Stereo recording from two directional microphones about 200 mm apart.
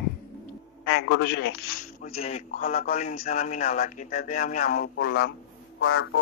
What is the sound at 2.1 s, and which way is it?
A man's voice, 35° left (ahead or behind).